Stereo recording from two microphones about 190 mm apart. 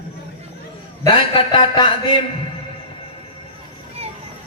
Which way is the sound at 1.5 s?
25° left (ahead or behind).